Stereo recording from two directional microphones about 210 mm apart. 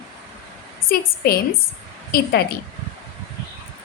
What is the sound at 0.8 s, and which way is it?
A woman's voice, 45° left (ahead or behind).